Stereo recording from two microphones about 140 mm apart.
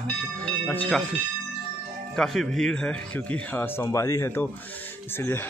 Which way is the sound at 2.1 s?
5° left (ahead or behind).